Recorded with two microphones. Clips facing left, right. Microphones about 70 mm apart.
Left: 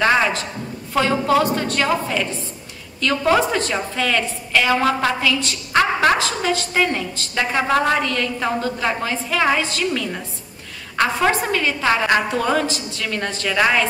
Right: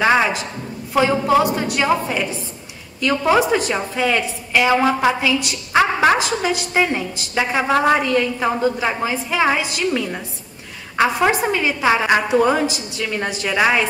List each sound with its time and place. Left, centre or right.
0.0 s a woman's voice: centre